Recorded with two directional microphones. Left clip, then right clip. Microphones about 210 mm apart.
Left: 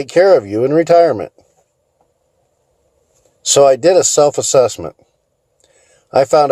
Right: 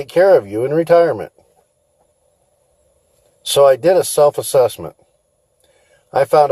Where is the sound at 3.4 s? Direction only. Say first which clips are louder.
Left 2 dB; 50° left (ahead or behind).